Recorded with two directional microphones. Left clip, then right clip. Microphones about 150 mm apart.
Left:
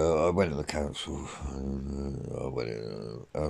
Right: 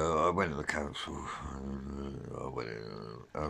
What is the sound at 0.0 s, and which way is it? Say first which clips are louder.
Speech: left 4 dB; 15° left (ahead or behind).